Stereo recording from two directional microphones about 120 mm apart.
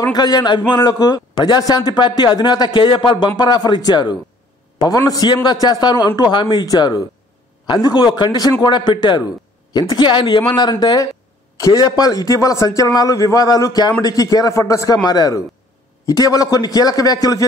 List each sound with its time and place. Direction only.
0.0 s a man's voice: 35° left (ahead or behind)